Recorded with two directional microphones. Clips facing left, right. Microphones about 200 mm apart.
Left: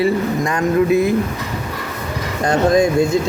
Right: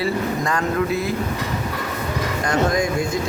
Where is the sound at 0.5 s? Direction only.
20° left (ahead or behind).